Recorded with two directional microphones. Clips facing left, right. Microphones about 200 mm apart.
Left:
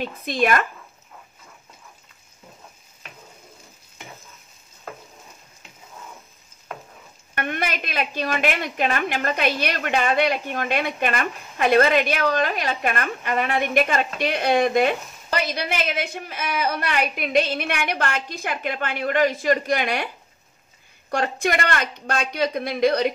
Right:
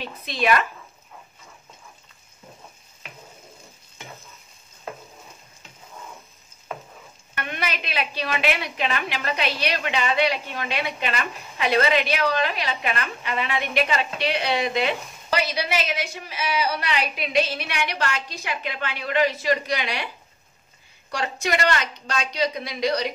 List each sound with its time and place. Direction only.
0.0 s a woman's voice: 50° left (ahead or behind)
4.1 s stir: centre (ahead or behind)
7.3 s a woman's voice: 50° left (ahead or behind)
21.1 s a woman's voice: 50° left (ahead or behind)